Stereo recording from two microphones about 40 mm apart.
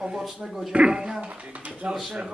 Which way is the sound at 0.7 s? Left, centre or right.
Right.